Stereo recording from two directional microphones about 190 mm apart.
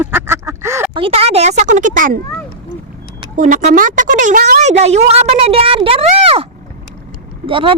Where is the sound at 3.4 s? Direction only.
45° right (ahead or behind).